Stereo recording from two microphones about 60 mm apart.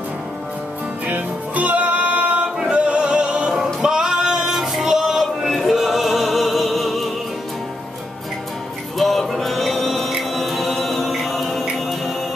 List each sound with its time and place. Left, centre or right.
1.0 s music: right
3.5 s singing: centre
8.9 s music: centre
10.3 s chant: centre